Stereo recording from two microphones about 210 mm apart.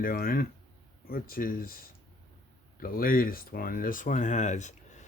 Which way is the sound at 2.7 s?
45° left (ahead or behind).